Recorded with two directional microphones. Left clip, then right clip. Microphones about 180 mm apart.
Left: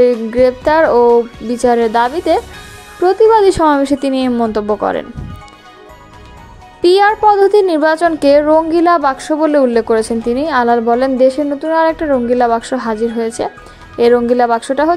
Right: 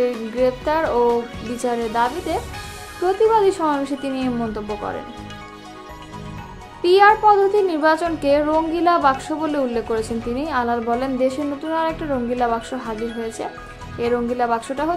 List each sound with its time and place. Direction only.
0.4 s a woman's voice: 40° left (ahead or behind)
6.8 s a woman's voice: 45° left (ahead or behind)